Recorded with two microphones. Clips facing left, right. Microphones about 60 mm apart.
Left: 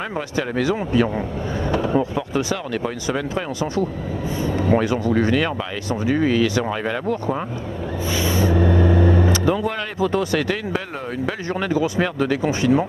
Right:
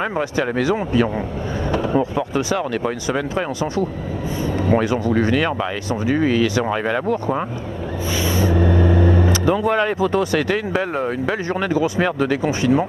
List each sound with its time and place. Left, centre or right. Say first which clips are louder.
0.2 s speech: even; right
8.1 s a sound: even; right
9.5 s speech: right 4 dB; right